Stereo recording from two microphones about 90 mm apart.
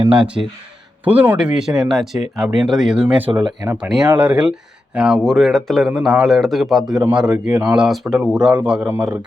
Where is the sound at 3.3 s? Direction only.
60° right (ahead or behind).